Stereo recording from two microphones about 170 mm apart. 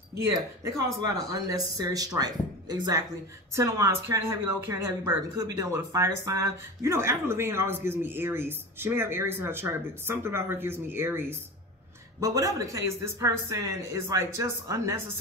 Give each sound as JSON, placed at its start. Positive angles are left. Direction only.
{"t": 0.7, "sound": "speech", "side_deg": -20}